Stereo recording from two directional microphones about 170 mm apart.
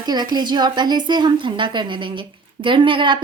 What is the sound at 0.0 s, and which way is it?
A woman's voice, 25° right (ahead or behind).